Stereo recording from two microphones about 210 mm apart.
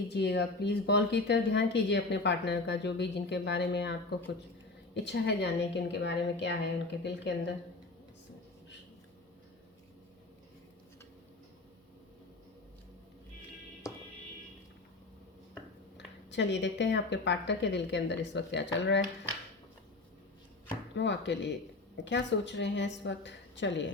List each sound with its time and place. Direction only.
0.1 s speech: 50° left (ahead or behind)
5.0 s speech: 55° left (ahead or behind)
13.8 s music: 15° left (ahead or behind)
16.0 s speech: 55° left (ahead or behind)
20.9 s a woman's voice: 60° left (ahead or behind)